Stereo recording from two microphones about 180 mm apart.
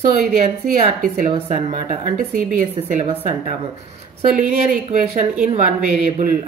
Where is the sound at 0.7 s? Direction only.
50° right (ahead or behind).